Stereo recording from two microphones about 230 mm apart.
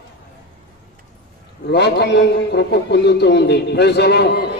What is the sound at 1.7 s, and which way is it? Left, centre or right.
A man's voice, left.